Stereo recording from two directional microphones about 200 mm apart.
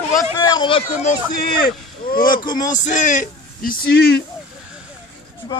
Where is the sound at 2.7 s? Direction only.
40° left (ahead or behind); by 4.2 s 55° left (ahead or behind).